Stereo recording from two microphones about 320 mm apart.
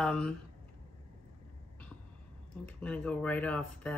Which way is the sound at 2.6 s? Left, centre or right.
Centre.